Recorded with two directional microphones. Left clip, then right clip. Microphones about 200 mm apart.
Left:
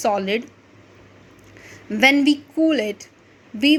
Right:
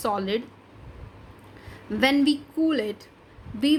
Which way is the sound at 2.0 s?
15° left (ahead or behind).